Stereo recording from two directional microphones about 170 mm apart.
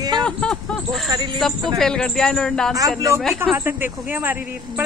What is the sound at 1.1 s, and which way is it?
Speech, 25° right (ahead or behind).